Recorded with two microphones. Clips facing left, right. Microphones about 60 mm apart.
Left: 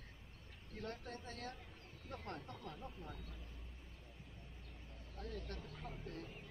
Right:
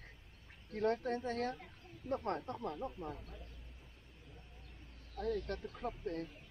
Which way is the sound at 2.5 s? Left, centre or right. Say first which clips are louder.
Right 10 dB; right.